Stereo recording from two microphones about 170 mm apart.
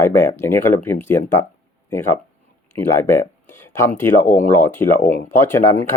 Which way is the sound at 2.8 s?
15° left (ahead or behind).